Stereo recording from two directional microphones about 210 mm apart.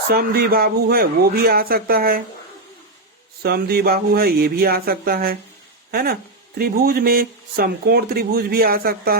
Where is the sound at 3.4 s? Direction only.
45° right (ahead or behind).